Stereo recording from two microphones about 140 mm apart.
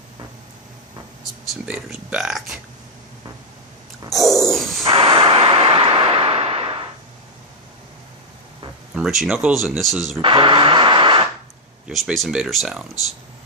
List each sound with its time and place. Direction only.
1.6 s speech: 10° right (ahead or behind)
4.1 s a sound: centre (ahead or behind)
4.9 s a sound: 40° right (ahead or behind)
9.0 s speech: centre (ahead or behind)
10.2 s radio: 35° right (ahead or behind)
11.9 s speech: centre (ahead or behind)